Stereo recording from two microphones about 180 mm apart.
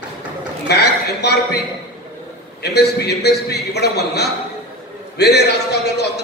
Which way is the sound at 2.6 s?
65° left (ahead or behind).